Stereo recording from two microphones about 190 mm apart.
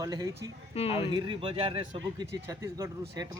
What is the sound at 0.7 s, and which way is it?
Speech, 30° left (ahead or behind).